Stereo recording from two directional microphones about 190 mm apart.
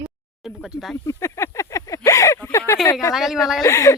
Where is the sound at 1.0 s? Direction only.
15° left (ahead or behind).